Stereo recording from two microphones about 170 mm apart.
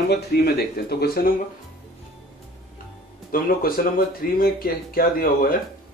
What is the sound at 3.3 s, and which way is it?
Speech, 60° left (ahead or behind).